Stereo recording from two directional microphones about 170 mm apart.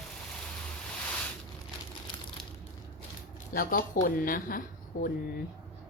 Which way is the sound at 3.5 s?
55° left (ahead or behind).